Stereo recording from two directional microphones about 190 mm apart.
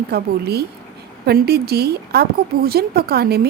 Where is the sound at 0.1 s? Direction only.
55° right (ahead or behind).